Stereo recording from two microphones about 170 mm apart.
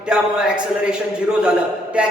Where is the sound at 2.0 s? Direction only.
5° right (ahead or behind).